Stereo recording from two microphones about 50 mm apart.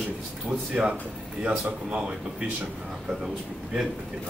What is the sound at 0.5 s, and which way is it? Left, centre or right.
Speech, right.